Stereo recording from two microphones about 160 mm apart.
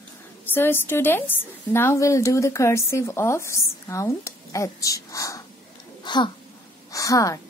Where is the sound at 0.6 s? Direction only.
15° left (ahead or behind); by 6.3 s 30° left (ahead or behind).